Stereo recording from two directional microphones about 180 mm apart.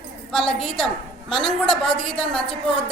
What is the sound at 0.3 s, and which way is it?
A woman's voice, 5° left (ahead or behind).